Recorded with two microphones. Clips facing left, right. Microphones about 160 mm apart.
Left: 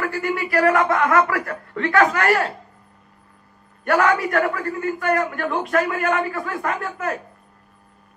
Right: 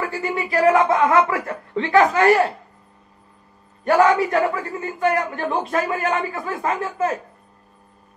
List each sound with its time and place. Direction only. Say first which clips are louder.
0.0 s a man's voice: left 1 dB; 20° right (ahead or behind)
3.8 s a man's voice: right 3 dB; 20° right (ahead or behind)